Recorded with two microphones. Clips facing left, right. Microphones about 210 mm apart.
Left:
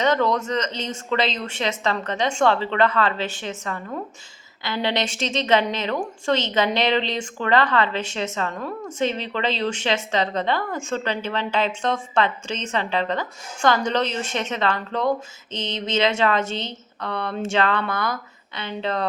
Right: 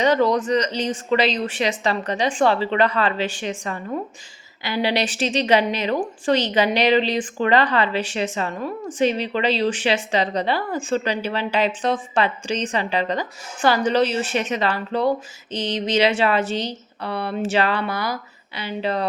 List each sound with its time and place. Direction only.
0.0 s a woman's voice: 10° right (ahead or behind)